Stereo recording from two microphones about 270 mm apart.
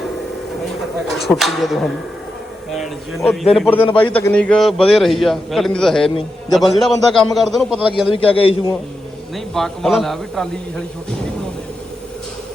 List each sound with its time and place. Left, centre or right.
1.4 s a man's voice: centre
8.1 s a man's voice: centre
9.3 s a man's voice: centre